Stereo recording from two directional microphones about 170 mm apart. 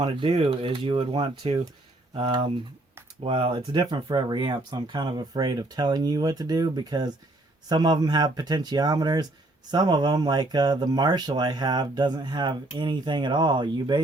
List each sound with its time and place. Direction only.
0.0 s speech: 30° right (ahead or behind)